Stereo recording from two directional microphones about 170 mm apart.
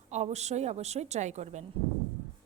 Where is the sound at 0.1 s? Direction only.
40° right (ahead or behind).